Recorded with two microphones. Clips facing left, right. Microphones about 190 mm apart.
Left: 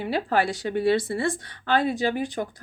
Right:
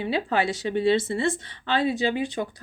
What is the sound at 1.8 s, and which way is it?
Speech, 50° left (ahead or behind).